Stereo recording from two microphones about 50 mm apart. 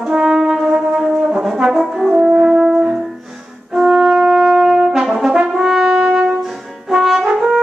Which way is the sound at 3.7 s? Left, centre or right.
Centre.